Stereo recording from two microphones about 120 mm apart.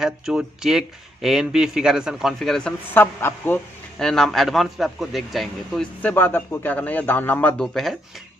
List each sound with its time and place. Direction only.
0.0 s speech: 5° right (ahead or behind)
2.9 s a man's voice: 15° left (ahead or behind)
4.0 s a man's voice: 5° left (ahead or behind)
7.6 s speech: centre (ahead or behind)